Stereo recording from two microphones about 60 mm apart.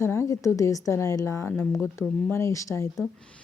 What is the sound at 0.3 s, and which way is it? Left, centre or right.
A woman's voice, left.